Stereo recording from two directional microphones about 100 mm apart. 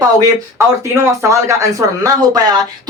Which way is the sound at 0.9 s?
30° right (ahead or behind).